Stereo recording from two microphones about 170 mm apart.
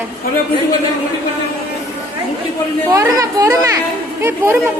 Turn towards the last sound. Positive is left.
turn(degrees=-15)  # may be behind; listen again after turning